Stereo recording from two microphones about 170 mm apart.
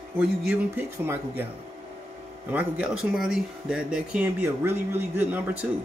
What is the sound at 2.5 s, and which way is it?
Speech, 10° right (ahead or behind).